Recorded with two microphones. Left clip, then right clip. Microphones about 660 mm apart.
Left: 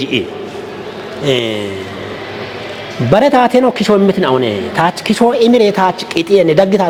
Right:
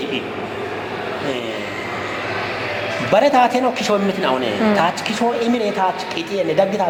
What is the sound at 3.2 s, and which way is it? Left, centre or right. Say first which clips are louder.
Speech: left 5 dB; left.